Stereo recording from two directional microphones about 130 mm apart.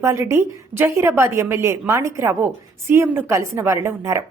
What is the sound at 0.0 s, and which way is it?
Speech, 20° right (ahead or behind).